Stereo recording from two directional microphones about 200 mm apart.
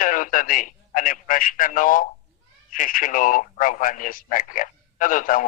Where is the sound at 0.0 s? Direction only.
40° left (ahead or behind).